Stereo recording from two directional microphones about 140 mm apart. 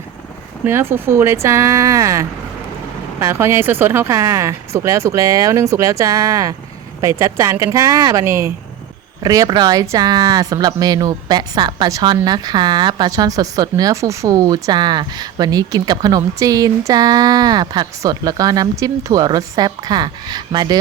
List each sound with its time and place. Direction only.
0.6 s speech: 15° right (ahead or behind)